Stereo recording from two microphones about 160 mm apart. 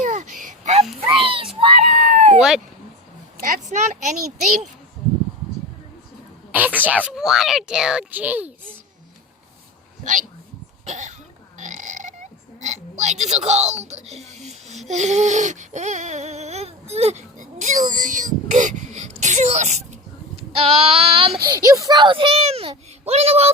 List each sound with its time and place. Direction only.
0.0 s a sound: 55° right (ahead or behind)
1.1 s a sound: 30° right (ahead or behind); by 2.4 s 50° right (ahead or behind)
3.4 s speech: 45° right (ahead or behind)
6.5 s a child's voice: 10° right (ahead or behind)
10.0 s speech: 50° right (ahead or behind)
11.5 s burping: 50° right (ahead or behind)
12.5 s speech: 45° right (ahead or behind)
14.8 s a sound: 45° right (ahead or behind)
19.2 s a child's voice: 45° right (ahead or behind)
21.4 s a child's voice: 20° right (ahead or behind); by 23.5 s 40° right (ahead or behind)